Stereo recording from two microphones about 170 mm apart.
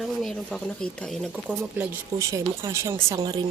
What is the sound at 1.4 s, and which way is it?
Speech, 10° right (ahead or behind).